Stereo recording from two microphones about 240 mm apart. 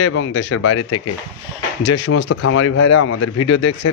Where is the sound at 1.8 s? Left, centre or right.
Left.